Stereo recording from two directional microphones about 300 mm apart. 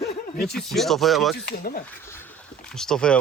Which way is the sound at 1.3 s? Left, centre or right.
Left.